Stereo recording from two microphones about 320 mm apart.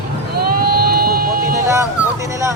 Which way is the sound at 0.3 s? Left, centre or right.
Right.